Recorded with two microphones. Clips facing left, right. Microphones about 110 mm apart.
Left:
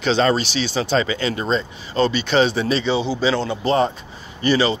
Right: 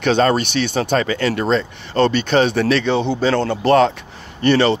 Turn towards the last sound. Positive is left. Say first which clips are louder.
# right 4 dB
turn(degrees=-60)  # may be behind; listen again after turning